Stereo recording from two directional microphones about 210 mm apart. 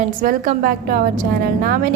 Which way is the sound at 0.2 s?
40° right (ahead or behind).